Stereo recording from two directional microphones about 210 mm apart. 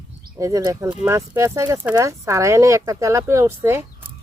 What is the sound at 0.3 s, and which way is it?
Speech, 15° right (ahead or behind).